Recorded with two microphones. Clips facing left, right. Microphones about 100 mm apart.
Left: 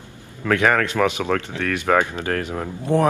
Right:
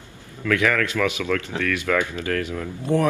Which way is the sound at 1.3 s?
55° left (ahead or behind).